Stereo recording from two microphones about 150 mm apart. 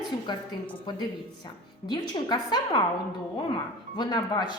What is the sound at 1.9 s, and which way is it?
A woman's voice, 30° left (ahead or behind).